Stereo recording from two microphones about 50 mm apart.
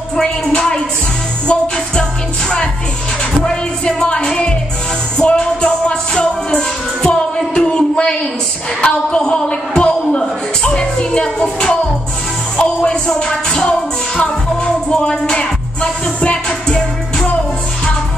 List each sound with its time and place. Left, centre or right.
0.1 s music: centre
3.4 s music: centre
8.8 s a sound: centre
12.5 s music: centre
16.4 s music: centre